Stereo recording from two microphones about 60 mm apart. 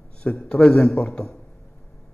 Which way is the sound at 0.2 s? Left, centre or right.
Centre.